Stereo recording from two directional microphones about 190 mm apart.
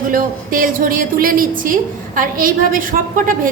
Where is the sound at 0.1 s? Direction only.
45° right (ahead or behind).